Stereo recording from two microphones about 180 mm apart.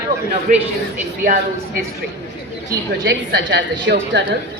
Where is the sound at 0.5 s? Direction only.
45° right (ahead or behind).